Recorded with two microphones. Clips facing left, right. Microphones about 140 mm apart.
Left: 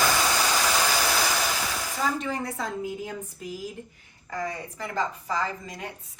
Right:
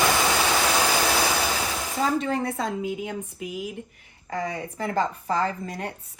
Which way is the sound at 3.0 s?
75° right (ahead or behind).